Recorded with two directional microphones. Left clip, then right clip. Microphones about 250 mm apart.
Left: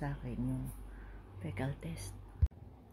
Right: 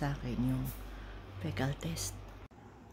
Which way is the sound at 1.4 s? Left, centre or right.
Centre.